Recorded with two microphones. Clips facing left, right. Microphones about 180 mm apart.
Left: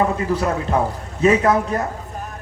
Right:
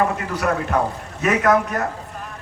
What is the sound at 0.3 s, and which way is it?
A man's voice, 25° left (ahead or behind).